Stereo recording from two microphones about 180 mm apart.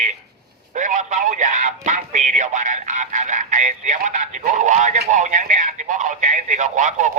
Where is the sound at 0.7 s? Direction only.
45° right (ahead or behind).